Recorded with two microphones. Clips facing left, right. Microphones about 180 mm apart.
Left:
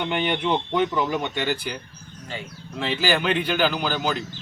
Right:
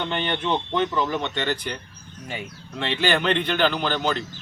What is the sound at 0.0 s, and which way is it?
Speech, 10° left (ahead or behind).